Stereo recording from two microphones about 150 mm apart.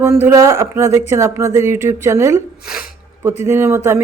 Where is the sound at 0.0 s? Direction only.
15° right (ahead or behind).